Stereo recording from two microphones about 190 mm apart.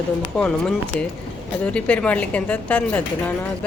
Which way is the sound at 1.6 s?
5° left (ahead or behind).